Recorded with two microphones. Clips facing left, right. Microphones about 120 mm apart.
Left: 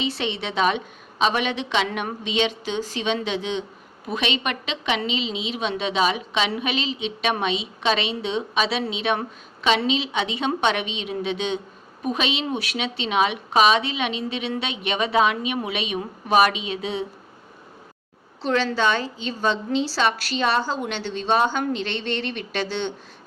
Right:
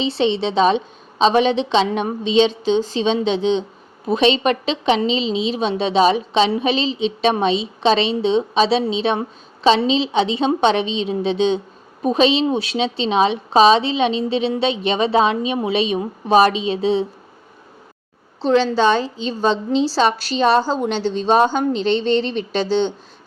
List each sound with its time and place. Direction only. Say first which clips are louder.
0.0 s a woman's voice: right 8 dB; 30° right (ahead or behind)
18.4 s a woman's voice: right 6 dB; 30° right (ahead or behind)